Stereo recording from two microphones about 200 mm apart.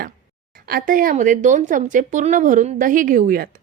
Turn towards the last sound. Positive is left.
turn(degrees=-45)  # may be behind; listen again after turning